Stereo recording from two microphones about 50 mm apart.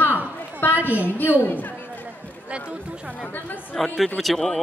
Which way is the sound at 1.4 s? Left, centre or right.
Left.